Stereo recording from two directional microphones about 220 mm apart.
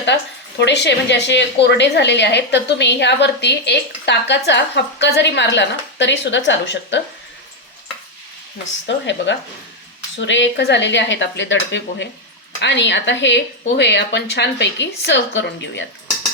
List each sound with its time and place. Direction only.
0.6 s a woman's voice: 50° left (ahead or behind)
8.9 s a woman's voice: 55° left (ahead or behind)